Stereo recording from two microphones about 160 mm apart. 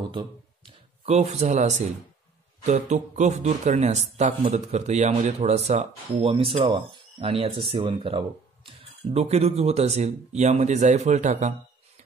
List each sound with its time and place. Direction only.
1.0 s speech: 40° right (ahead or behind)